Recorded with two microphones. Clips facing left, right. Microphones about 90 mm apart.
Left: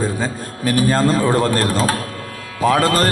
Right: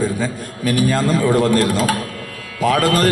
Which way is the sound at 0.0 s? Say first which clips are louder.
Right 1 dB; 35° left (ahead or behind).